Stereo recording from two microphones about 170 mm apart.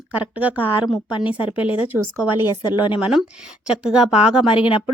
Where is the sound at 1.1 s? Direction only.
30° left (ahead or behind).